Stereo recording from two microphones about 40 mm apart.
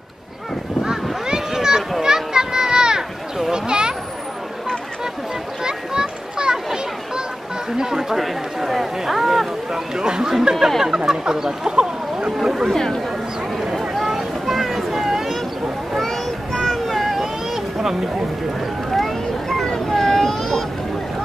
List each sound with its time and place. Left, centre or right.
1.2 s a sound: centre
2.0 s children playing: centre
3.5 s a sound: centre
5.6 s children playing: centre
7.7 s chatter: centre
9.9 s chatter: centre
11.1 s a sound: centre
12.6 s speech: centre
13.7 s vehicle: centre
16.5 s vehicle: centre
17.7 s boat: centre
18.9 s vehicle: centre
19.9 s baby cry: centre